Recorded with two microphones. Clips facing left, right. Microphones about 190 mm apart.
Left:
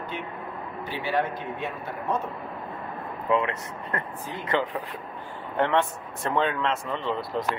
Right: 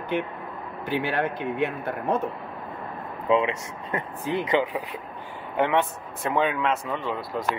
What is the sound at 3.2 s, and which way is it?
Speech, 20° right (ahead or behind).